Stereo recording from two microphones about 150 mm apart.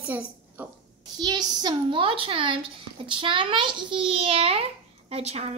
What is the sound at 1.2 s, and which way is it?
A child's voice, 25° right (ahead or behind).